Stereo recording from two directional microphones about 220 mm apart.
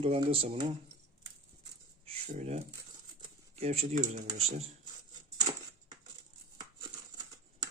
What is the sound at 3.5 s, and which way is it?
Speech, 30° right (ahead or behind).